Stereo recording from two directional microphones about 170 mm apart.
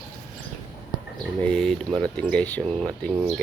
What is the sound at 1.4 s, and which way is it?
Speech, 5° left (ahead or behind).